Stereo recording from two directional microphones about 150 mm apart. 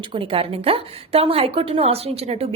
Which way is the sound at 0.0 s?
35° right (ahead or behind).